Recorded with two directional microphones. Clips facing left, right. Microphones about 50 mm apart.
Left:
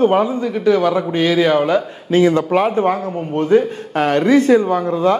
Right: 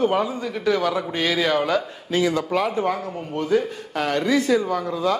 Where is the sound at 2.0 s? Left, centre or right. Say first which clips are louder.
Left 9 dB; left.